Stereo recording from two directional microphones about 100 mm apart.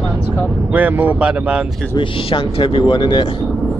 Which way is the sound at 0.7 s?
15° right (ahead or behind).